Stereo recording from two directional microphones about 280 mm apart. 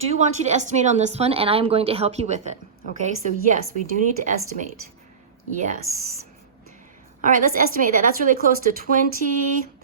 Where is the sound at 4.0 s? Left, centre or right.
Right.